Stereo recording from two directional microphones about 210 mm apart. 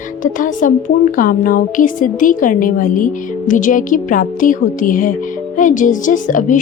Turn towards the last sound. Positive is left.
turn(degrees=40)  # may be behind; listen again after turning